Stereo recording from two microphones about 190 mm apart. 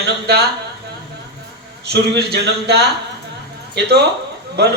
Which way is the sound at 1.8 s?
60° right (ahead or behind).